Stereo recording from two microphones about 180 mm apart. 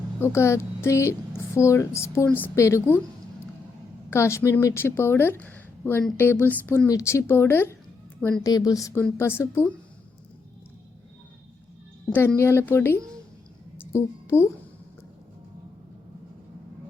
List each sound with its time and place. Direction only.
0.2 s a woman's voice: 15° left (ahead or behind)
4.1 s a woman's voice: 15° left (ahead or behind)
12.1 s a woman's voice: 10° left (ahead or behind)